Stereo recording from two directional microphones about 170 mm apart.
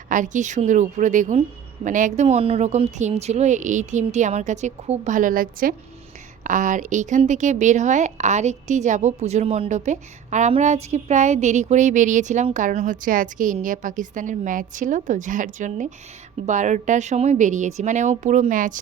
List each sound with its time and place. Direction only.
0.1 s speech: 45° right (ahead or behind)